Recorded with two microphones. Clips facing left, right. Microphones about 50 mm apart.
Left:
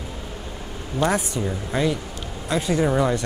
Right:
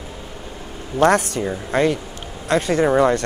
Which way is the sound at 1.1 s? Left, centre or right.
Right.